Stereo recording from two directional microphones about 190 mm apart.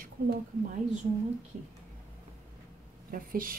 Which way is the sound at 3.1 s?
50° right (ahead or behind).